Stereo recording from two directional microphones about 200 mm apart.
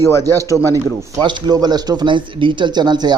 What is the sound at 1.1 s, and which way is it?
Speech, 20° right (ahead or behind).